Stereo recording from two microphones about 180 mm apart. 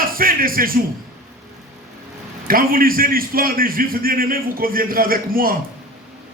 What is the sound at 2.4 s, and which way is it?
A man's voice, 55° right (ahead or behind).